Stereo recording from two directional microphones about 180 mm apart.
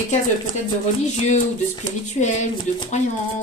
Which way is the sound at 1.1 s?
40° left (ahead or behind).